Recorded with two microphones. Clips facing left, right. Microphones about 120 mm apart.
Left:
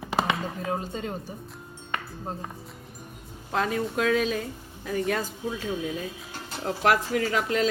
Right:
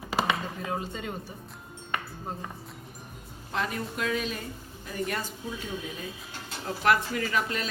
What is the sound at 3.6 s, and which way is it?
Speech, 90° left.